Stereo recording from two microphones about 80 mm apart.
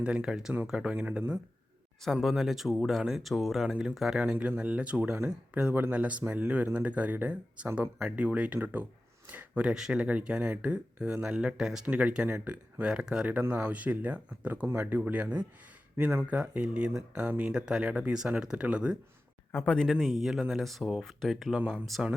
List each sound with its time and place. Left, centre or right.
0.0 s speech: centre
2.2 s speech: centre
4.2 s speech: centre
9.3 s a sound: right
9.6 s speech: centre
14.7 s speech: right
14.9 s speech: centre
19.6 s speech: centre
19.9 s speech: centre